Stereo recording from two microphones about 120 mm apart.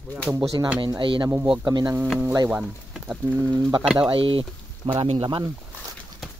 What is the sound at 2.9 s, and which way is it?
Speech, 5° right (ahead or behind).